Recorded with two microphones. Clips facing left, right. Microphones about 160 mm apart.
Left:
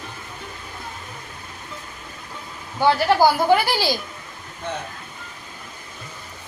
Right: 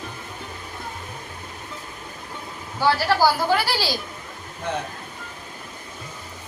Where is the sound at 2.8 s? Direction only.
20° left (ahead or behind).